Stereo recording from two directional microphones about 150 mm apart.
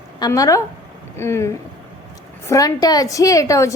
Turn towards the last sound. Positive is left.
turn(degrees=20)  # may be behind; listen again after turning